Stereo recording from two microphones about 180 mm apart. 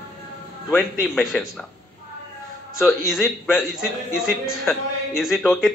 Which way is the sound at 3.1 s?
5° right (ahead or behind).